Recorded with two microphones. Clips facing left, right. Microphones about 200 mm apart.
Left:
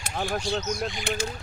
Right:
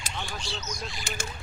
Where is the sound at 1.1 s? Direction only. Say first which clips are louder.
Left 8 dB; 60° left (ahead or behind).